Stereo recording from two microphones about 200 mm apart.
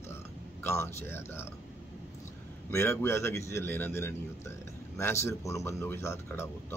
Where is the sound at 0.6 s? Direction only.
15° left (ahead or behind).